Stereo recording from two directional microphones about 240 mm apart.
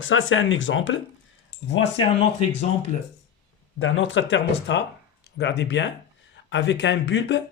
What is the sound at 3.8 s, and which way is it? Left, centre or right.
Speech, left.